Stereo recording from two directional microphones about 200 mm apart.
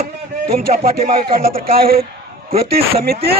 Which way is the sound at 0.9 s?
30° right (ahead or behind).